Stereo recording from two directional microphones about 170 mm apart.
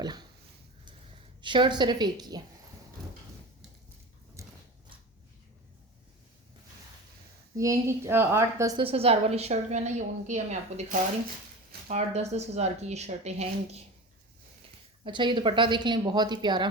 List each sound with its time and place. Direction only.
0.0 s a sound: 25° right (ahead or behind)
1.4 s speech: 25° right (ahead or behind)
4.4 s a sound: 15° right (ahead or behind)
7.5 s a woman's voice: 20° right (ahead or behind)
8.8 s a woman's voice: 35° right (ahead or behind)
15.0 s speech: 30° right (ahead or behind)